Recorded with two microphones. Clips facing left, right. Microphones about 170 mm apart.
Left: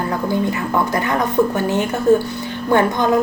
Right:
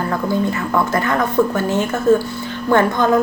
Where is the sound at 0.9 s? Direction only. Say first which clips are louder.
Right 1 dB; 15° left (ahead or behind).